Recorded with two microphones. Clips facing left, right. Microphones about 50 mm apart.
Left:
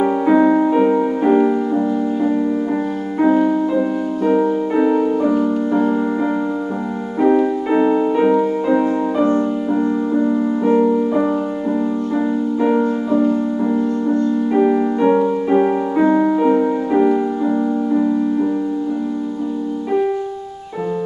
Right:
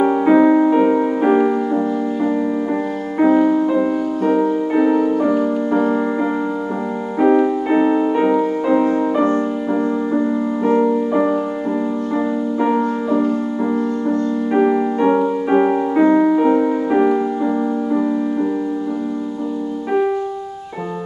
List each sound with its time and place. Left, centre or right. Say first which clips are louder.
0.0 s music: right 1 dB; centre
7.2 s music: right 1 dB; centre
12.5 s music: left 1 dB; centre
14.0 s music: left 2 dB; centre